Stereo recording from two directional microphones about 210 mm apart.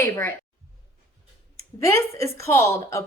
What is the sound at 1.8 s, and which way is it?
A woman's voice, 15° left (ahead or behind).